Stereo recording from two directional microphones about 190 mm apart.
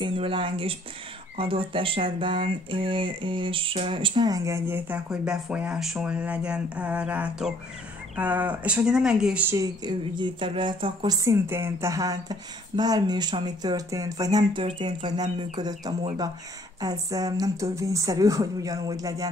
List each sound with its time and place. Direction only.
0.0 s speech: 30° right (ahead or behind); by 9.6 s 5° right (ahead or behind)
9.6 s speech: 25° right (ahead or behind)